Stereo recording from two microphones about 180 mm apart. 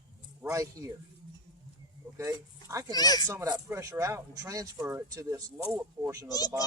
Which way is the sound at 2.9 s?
20° left (ahead or behind).